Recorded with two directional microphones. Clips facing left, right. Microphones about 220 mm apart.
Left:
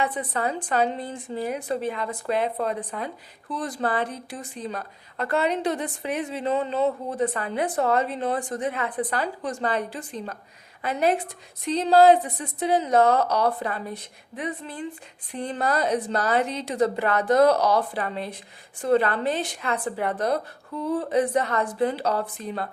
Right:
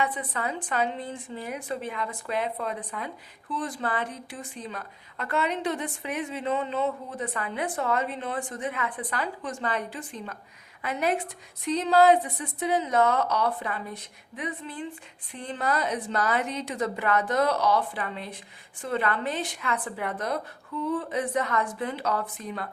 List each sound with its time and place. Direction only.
0.0 s a woman's voice: 35° left (ahead or behind)
11.7 s a woman's voice: 35° left (ahead or behind)